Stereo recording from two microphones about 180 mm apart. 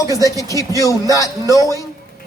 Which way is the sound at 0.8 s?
20° left (ahead or behind).